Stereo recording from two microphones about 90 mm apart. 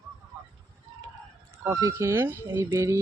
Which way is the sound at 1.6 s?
30° right (ahead or behind).